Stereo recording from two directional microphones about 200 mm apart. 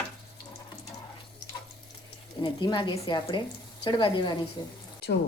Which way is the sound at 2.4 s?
20° left (ahead or behind).